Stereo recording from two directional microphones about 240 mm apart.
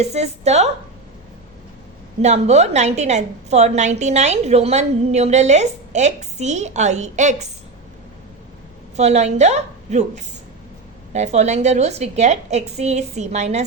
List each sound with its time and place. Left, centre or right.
0.0 s a woman's voice: right
2.2 s a woman's voice: right
9.0 s a woman's voice: right